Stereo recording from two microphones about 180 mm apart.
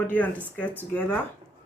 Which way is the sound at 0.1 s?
10° left (ahead or behind).